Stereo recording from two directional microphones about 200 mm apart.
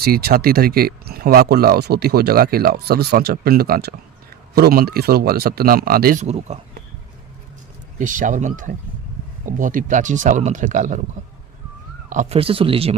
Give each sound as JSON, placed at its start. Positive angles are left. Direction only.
{"t": 0.0, "sound": "speech", "side_deg": -50}
{"t": 6.2, "sound": "speech", "side_deg": -35}
{"t": 7.9, "sound": "speech", "side_deg": -40}
{"t": 12.0, "sound": "speech", "side_deg": -35}